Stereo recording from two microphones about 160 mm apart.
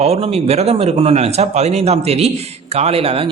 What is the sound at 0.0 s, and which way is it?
A man's voice, 40° right (ahead or behind).